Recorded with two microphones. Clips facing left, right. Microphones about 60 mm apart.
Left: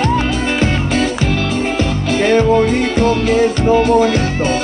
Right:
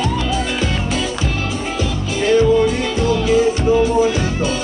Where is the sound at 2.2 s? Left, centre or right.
Left.